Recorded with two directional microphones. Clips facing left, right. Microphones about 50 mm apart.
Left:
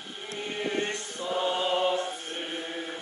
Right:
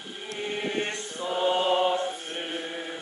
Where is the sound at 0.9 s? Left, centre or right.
Right.